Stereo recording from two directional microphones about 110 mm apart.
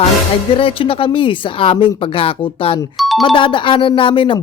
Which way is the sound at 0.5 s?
55° left (ahead or behind).